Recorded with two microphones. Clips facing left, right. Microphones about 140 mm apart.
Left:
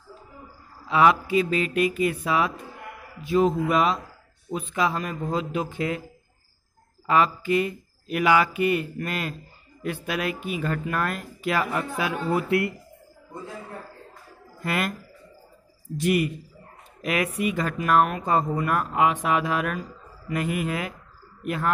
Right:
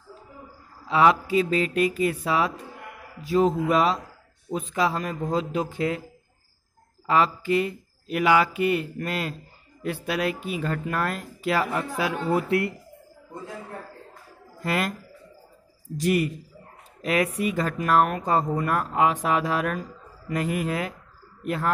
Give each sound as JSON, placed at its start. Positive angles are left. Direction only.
{"t": 0.8, "sound": "speech", "side_deg": -30}
{"t": 7.1, "sound": "speech", "side_deg": -30}
{"t": 14.6, "sound": "speech", "side_deg": -30}
{"t": 16.0, "sound": "a man's voice", "side_deg": -35}